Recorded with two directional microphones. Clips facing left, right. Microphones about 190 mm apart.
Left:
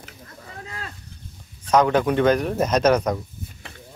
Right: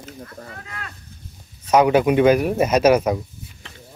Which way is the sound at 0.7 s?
30° left (ahead or behind).